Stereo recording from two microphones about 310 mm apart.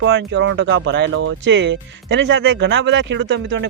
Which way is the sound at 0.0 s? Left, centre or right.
Right.